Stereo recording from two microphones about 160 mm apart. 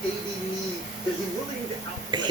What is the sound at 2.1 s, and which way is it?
Speech, 30° right (ahead or behind).